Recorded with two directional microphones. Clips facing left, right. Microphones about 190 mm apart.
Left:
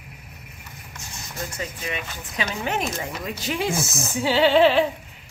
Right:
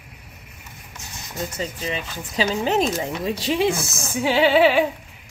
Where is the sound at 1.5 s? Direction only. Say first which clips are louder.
Right 3 dB; 30° right (ahead or behind).